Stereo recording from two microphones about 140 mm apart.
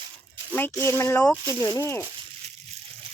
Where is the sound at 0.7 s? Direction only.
20° left (ahead or behind).